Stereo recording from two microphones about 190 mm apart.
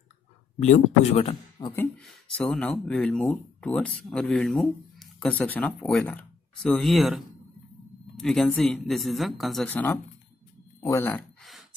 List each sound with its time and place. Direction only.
0.6 s speech: 35° left (ahead or behind)
2.3 s speech: 5° left (ahead or behind)